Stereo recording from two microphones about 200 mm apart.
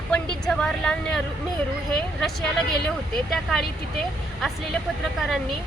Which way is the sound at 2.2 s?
Centre (ahead or behind).